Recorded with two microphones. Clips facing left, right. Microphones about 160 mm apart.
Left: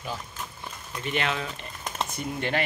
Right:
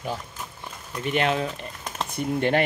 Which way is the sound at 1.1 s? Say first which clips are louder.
Right 5 dB; 45° right (ahead or behind).